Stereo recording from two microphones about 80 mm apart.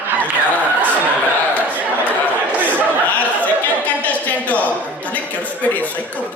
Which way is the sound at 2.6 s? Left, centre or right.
Centre.